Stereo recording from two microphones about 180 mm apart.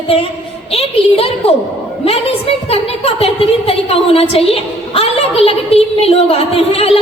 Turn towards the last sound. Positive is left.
turn(degrees=30)  # may be behind; listen again after turning